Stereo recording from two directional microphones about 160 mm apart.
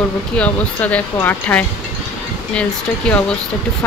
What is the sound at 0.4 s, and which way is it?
Speech, 10° left (ahead or behind).